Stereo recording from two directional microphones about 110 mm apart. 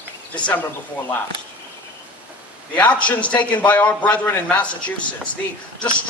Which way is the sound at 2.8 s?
10° left (ahead or behind).